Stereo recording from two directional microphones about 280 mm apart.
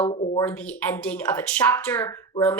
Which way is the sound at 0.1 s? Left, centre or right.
Centre.